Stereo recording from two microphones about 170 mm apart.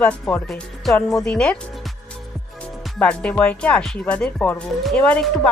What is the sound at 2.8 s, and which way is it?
A woman's voice, 5° left (ahead or behind).